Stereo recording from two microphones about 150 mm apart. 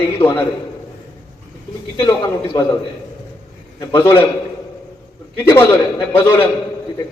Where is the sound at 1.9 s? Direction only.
30° left (ahead or behind).